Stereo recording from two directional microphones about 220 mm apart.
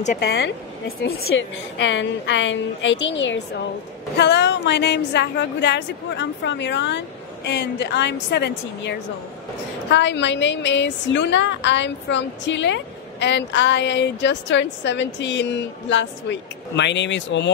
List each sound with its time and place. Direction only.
0.0 s speech: 35° left (ahead or behind)
0.3 s a woman's voice: 45° left (ahead or behind)